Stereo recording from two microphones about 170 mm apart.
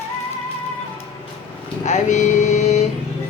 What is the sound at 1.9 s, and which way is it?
Vehicle, 45° left (ahead or behind).